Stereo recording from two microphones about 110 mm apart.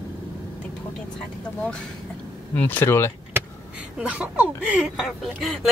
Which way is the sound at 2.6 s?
20° left (ahead or behind).